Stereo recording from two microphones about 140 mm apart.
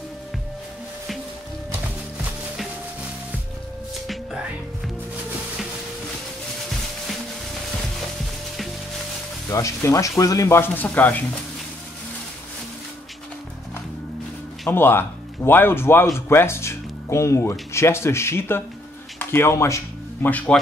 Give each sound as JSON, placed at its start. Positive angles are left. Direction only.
{"t": 9.5, "sound": "speech", "side_deg": 25}
{"t": 14.7, "sound": "speech", "side_deg": 15}